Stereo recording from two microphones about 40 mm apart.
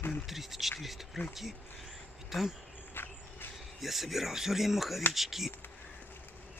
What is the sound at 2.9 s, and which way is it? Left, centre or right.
Walk, left.